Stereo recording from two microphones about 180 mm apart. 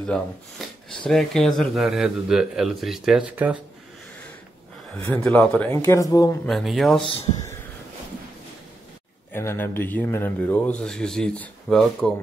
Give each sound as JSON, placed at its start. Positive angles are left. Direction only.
{"t": 0.0, "sound": "speech", "side_deg": 5}
{"t": 5.1, "sound": "a man's voice", "side_deg": 10}
{"t": 5.8, "sound": "speech", "side_deg": 20}
{"t": 6.4, "sound": "speech", "side_deg": 0}
{"t": 9.3, "sound": "a man's voice", "side_deg": 15}